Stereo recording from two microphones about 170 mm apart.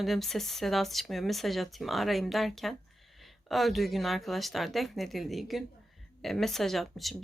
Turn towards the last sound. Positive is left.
turn(degrees=0)  # may be behind; listen again after turning